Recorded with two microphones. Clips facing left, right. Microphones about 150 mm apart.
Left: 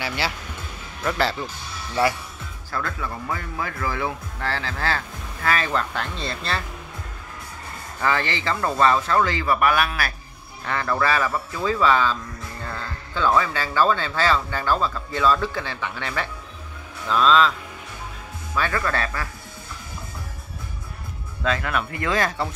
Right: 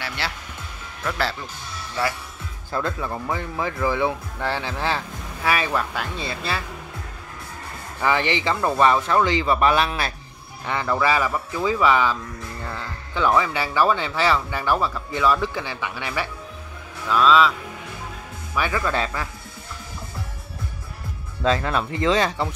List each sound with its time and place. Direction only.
0.0 s speech: 5° left (ahead or behind)
2.7 s speech: 25° right (ahead or behind); by 6.6 s 5° right (ahead or behind)
8.0 s speech: 15° right (ahead or behind)
18.5 s speech: 10° right (ahead or behind)
21.5 s speech: 30° right (ahead or behind)